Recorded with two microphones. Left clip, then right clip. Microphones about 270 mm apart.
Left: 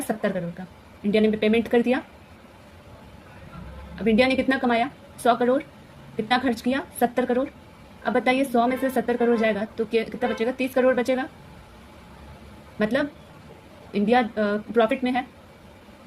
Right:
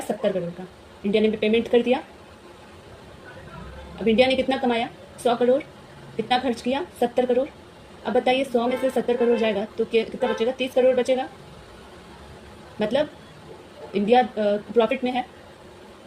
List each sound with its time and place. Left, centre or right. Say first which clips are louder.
1.1 s a woman's voice: even; left
4.0 s a woman's voice: right 2 dB; left
12.8 s a woman's voice: right 1 dB; left